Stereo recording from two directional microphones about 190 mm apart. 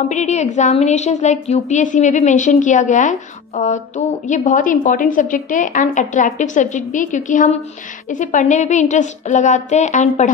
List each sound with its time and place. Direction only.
0.1 s a woman's voice: 40° left (ahead or behind)